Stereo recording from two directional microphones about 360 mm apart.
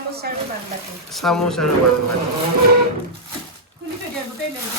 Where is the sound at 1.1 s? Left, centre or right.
Centre.